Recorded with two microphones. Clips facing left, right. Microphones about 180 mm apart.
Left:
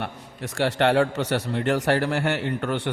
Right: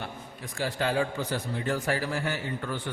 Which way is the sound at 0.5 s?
75° left (ahead or behind).